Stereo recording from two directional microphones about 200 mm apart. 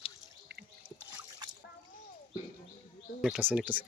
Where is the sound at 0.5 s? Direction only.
55° right (ahead or behind).